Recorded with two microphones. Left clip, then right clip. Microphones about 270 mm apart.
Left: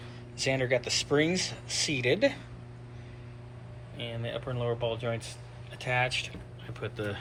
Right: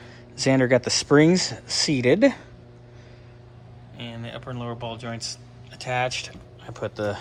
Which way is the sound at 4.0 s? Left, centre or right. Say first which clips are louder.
Even; centre.